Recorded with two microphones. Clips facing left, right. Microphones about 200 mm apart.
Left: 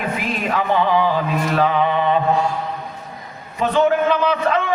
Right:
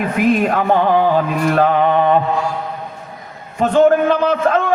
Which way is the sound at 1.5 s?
50° right (ahead or behind).